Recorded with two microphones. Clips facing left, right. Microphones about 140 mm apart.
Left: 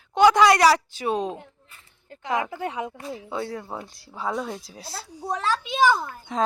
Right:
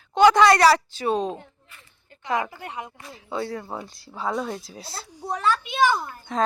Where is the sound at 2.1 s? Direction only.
90° left.